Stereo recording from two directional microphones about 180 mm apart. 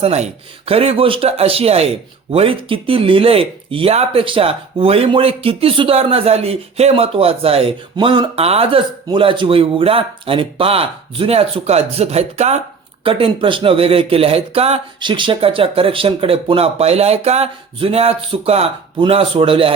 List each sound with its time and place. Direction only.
0.0 s speech: 35° right (ahead or behind)